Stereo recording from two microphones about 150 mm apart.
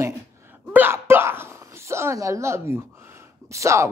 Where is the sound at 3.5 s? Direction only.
20° right (ahead or behind).